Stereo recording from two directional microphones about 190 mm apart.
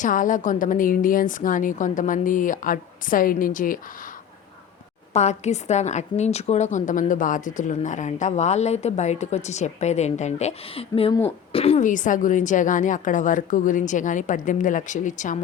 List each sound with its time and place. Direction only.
0.0 s a woman's voice: 45° left (ahead or behind)
5.1 s a woman's voice: 35° left (ahead or behind)